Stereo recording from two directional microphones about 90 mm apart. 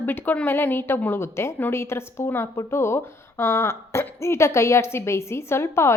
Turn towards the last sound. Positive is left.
turn(degrees=30)  # may be behind; listen again after turning